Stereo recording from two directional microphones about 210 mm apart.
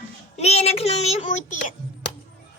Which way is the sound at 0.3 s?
30° left (ahead or behind).